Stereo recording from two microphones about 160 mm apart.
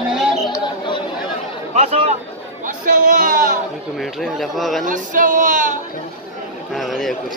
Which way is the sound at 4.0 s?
Centre (ahead or behind).